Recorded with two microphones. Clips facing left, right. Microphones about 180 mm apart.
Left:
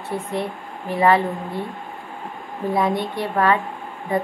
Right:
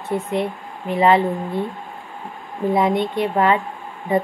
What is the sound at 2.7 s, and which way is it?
Speech, 20° right (ahead or behind).